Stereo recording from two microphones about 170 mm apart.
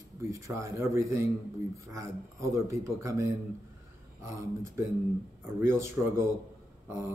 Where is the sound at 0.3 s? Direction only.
15° right (ahead or behind).